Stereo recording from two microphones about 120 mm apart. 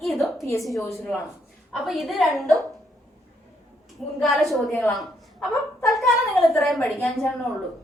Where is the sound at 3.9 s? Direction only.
Centre (ahead or behind).